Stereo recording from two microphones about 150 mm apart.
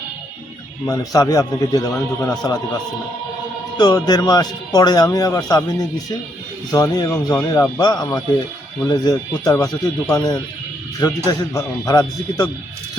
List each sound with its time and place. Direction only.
0.9 s speech: 20° left (ahead or behind)
3.8 s speech: 25° left (ahead or behind)
7.3 s speech: 15° left (ahead or behind)
7.8 s speech: 30° left (ahead or behind)